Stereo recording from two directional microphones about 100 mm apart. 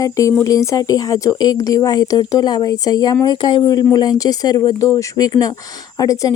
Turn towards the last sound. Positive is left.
turn(degrees=35)  # may be behind; listen again after turning